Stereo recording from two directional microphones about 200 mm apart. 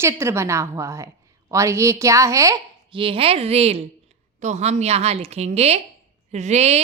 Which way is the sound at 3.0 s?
30° right (ahead or behind).